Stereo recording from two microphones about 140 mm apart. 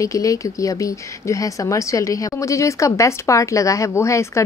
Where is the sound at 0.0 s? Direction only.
25° left (ahead or behind).